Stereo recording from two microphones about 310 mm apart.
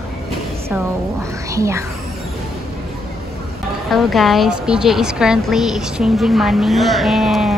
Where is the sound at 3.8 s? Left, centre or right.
Centre.